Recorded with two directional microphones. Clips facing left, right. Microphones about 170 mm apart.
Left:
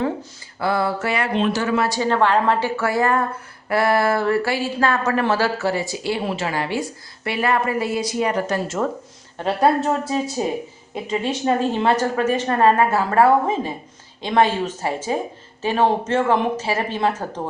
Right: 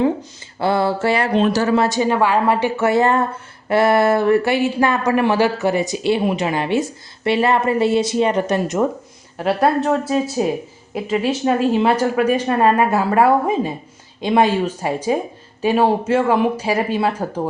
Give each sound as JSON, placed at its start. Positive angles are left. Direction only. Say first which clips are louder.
{"t": 0.6, "sound": "speech", "louder": "right 4 dB", "side_deg": -25}
{"t": 9.4, "sound": "speech", "louder": "right 1 dB", "side_deg": -5}